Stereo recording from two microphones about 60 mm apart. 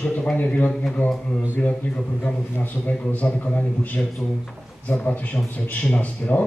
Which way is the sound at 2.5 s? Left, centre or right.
Left.